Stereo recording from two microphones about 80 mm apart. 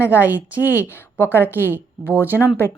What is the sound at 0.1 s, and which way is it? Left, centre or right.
Speech, right.